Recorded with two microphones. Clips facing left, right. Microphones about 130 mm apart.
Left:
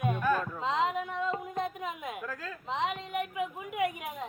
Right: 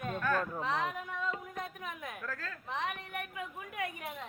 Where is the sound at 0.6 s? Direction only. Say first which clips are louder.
Left 5 dB; 20° left (ahead or behind).